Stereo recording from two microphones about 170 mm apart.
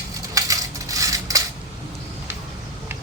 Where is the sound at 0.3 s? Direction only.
20° right (ahead or behind).